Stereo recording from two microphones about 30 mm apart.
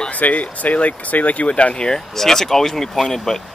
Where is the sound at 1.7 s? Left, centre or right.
Left.